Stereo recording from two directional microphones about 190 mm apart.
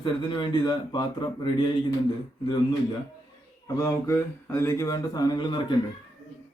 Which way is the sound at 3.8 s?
15° left (ahead or behind).